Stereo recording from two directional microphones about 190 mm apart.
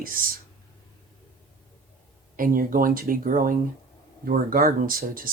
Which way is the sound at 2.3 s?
50° right (ahead or behind).